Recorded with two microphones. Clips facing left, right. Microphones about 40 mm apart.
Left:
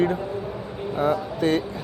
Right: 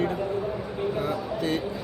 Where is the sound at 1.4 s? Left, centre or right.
Left.